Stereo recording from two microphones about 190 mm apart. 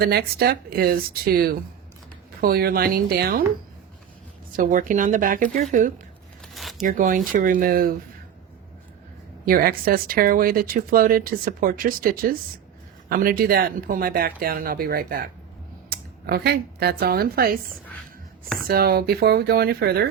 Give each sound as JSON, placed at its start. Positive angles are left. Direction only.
{"t": 0.0, "sound": "speech", "side_deg": -55}
{"t": 4.5, "sound": "speech", "side_deg": -45}
{"t": 6.4, "sound": "a sound", "side_deg": 0}
{"t": 6.8, "sound": "speech", "side_deg": -45}
{"t": 9.5, "sound": "speech", "side_deg": -50}
{"t": 18.7, "sound": "speech", "side_deg": -55}